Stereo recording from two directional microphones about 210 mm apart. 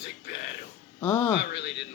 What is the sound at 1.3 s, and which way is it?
Speech, 55° left (ahead or behind).